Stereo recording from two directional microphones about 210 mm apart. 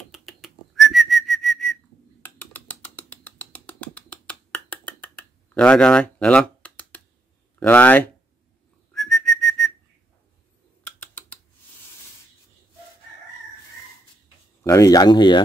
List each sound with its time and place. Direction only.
0.1 s whistling: centre (ahead or behind)
2.2 s a sound: 10° left (ahead or behind)
7.5 s speech: 10° left (ahead or behind)
8.9 s whistling: centre (ahead or behind)
10.8 s typing: 10° left (ahead or behind)
14.6 s speech: 15° left (ahead or behind)